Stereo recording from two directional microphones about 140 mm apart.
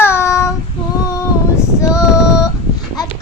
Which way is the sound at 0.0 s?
20° left (ahead or behind).